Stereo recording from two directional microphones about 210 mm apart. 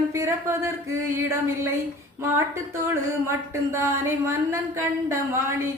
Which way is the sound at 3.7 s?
10° right (ahead or behind).